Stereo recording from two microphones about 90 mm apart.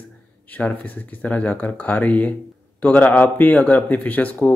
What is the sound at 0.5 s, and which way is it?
Speech, 15° left (ahead or behind).